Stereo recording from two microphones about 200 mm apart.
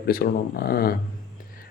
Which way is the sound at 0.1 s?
50° left (ahead or behind).